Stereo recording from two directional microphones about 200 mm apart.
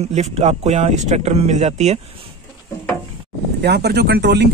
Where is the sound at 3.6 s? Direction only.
55° right (ahead or behind).